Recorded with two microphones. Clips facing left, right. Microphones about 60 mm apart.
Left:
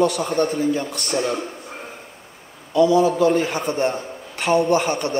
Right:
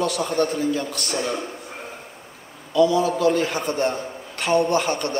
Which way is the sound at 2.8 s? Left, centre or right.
Centre.